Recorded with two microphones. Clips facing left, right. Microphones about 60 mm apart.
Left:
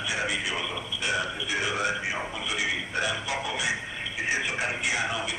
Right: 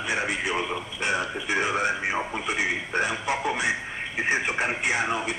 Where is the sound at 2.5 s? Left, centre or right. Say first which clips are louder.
Right 3 dB; right.